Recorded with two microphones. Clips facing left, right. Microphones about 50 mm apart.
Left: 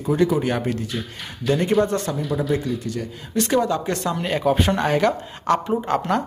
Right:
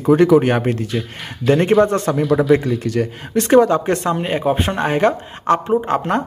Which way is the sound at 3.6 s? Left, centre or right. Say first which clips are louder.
Right 8 dB; right.